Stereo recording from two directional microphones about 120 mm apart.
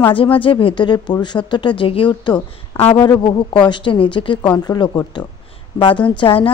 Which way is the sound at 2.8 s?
55° left (ahead or behind).